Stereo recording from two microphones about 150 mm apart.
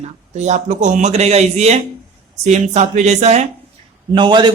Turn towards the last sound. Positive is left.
turn(degrees=-30)  # may be behind; listen again after turning